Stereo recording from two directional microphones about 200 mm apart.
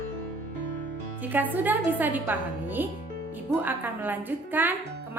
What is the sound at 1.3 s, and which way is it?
A woman's voice, 10° right (ahead or behind).